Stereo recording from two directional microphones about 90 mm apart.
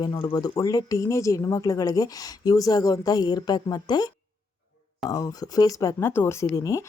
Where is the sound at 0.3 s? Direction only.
40° left (ahead or behind).